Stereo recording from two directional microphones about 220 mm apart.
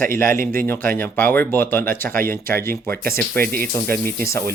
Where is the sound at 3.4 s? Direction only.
40° right (ahead or behind).